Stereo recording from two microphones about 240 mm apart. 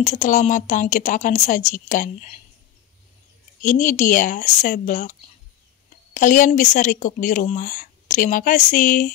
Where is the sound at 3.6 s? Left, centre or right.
Left.